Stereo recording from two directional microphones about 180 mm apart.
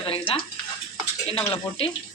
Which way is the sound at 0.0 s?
30° left (ahead or behind).